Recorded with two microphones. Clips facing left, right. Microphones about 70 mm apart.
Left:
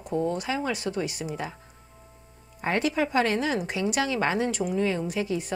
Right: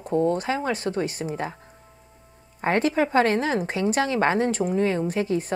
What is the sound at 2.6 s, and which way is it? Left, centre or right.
A woman's voice, right.